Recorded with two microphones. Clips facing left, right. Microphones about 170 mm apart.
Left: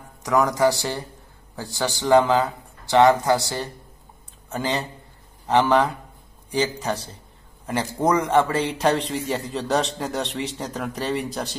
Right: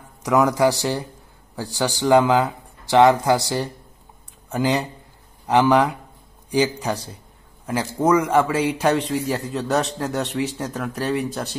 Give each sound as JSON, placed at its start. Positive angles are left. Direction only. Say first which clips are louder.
{"t": 0.2, "sound": "a man's voice", "louder": "right 2 dB", "side_deg": -20}